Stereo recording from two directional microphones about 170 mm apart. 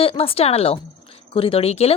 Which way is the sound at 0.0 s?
35° left (ahead or behind).